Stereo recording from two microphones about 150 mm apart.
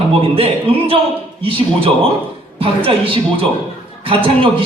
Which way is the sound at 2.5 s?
35° right (ahead or behind).